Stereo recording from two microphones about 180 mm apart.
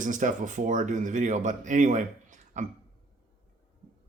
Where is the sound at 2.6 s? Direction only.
45° right (ahead or behind).